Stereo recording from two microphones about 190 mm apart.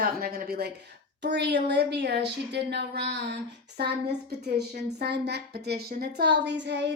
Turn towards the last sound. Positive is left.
turn(degrees=-65)  # may be behind; listen again after turning